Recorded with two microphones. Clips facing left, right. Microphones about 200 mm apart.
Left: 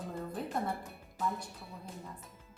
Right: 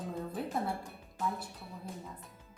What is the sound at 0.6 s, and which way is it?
Speech, 5° right (ahead or behind).